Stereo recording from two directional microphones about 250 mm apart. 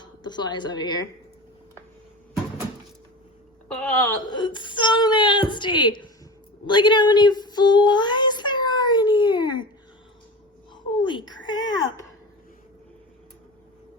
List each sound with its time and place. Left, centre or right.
0.0 s speech: centre
3.8 s speech: centre
4.3 s speech: centre
6.7 s child singing: centre
10.9 s baby cry: centre
11.4 s a sound: centre